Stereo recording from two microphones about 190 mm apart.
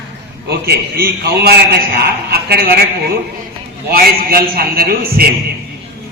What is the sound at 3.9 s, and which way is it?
A man's voice, 55° right (ahead or behind).